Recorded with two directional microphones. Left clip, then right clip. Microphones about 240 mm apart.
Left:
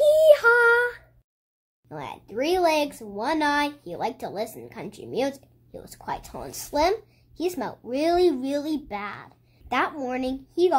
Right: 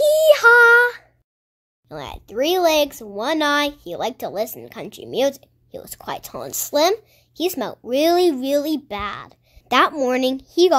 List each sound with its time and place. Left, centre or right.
0.0 s child singing: right
1.9 s speech: right